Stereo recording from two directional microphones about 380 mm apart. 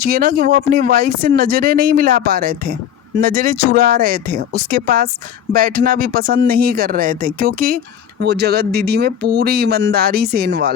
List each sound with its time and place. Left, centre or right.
0.0 s speech: right